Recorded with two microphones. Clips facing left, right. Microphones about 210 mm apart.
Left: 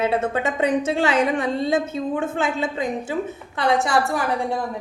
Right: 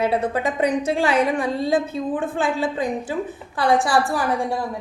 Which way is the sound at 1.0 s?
25° left (ahead or behind).